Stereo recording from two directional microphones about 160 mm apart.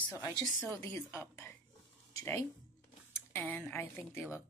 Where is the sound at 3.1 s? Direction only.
10° left (ahead or behind).